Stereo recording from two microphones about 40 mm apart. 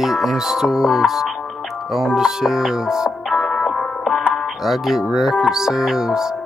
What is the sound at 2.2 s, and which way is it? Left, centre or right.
Music, centre.